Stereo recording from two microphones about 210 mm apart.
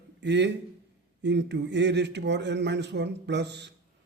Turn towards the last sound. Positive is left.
turn(degrees=-55)  # may be behind; listen again after turning